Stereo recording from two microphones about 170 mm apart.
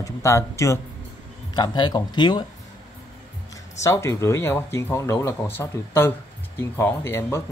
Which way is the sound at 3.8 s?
15° left (ahead or behind).